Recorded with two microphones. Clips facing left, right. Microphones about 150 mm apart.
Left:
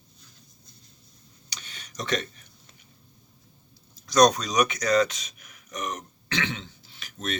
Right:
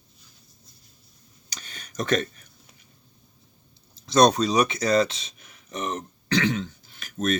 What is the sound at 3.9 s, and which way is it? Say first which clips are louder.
Speech: right 1 dB; 25° right (ahead or behind).